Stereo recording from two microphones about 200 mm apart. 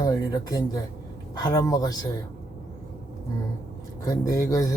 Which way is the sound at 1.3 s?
20° left (ahead or behind).